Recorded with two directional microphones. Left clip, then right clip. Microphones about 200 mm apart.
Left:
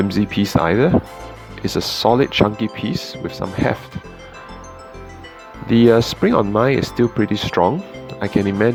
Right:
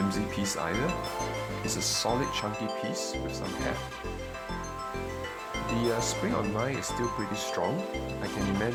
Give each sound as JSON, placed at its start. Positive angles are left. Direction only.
{"t": 0.1, "sound": "speech", "side_deg": 40}
{"t": 5.7, "sound": "speech", "side_deg": 40}